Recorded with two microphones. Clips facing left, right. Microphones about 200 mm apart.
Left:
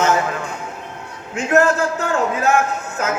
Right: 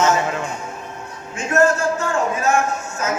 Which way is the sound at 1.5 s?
60° left (ahead or behind).